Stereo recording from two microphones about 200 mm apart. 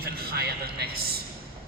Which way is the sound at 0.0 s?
50° right (ahead or behind).